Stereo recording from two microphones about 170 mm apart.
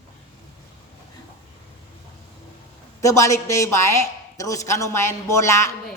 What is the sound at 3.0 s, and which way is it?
A woman's voice, 20° left (ahead or behind).